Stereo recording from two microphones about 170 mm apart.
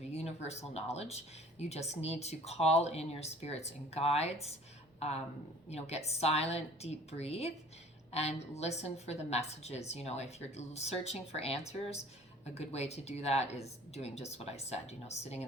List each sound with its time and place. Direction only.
0.1 s speech: 40° left (ahead or behind)